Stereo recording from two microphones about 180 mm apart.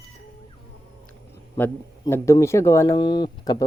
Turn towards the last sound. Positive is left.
turn(degrees=20)  # may be behind; listen again after turning